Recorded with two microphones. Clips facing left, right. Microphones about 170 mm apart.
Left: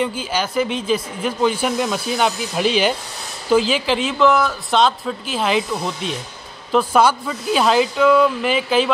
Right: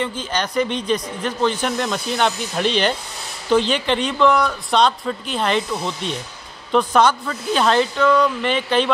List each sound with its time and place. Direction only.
0.0 s speech: 10° left (ahead or behind)